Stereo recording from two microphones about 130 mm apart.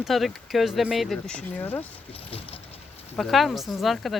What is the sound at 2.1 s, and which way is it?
Patter, 45° left (ahead or behind).